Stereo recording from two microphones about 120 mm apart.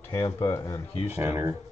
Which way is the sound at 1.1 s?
20° right (ahead or behind).